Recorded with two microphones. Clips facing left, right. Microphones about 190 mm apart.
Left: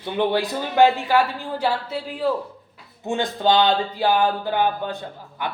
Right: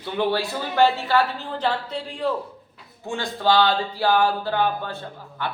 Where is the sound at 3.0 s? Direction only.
20° left (ahead or behind).